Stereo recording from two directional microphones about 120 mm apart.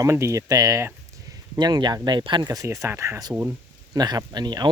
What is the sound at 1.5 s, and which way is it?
Speech, 35° right (ahead or behind).